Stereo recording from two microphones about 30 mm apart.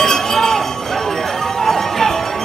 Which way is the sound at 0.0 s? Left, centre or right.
Centre.